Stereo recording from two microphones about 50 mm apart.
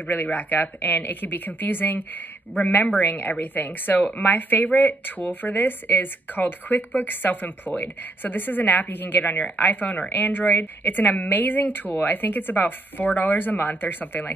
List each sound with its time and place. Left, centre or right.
0.1 s speech: left